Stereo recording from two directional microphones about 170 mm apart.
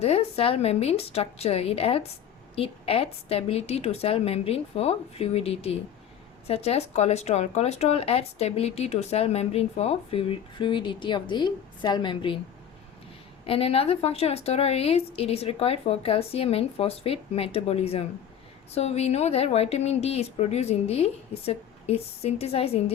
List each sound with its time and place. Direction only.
0.0 s speech: 35° left (ahead or behind)
13.4 s speech: 35° left (ahead or behind)